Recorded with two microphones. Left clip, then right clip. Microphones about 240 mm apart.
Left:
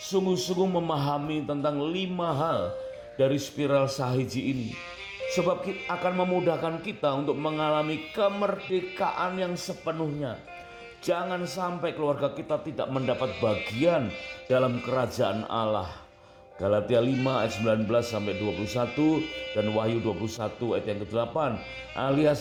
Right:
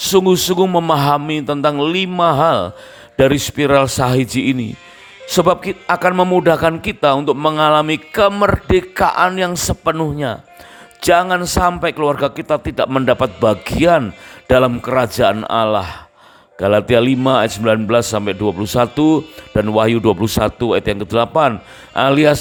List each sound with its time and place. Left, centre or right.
0.0 s a man's voice: right